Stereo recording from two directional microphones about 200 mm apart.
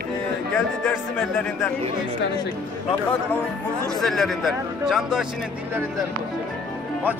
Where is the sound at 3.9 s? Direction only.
Centre (ahead or behind).